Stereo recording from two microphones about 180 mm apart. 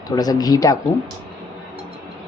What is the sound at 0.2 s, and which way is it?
Speech, 20° left (ahead or behind).